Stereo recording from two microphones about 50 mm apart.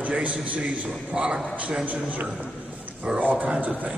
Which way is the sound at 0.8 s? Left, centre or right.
Centre.